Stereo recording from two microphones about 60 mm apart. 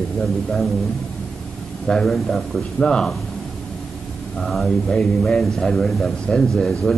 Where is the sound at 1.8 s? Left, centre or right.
Centre.